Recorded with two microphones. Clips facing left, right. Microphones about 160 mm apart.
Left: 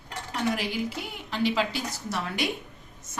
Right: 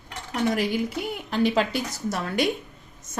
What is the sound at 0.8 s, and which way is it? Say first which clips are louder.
A woman's voice: right 5 dB; 50° right (ahead or behind).